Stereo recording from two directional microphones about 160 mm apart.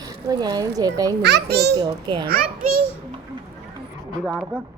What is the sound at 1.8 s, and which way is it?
Speech, 30° right (ahead or behind).